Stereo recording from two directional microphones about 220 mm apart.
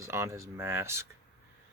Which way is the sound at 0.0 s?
10° right (ahead or behind).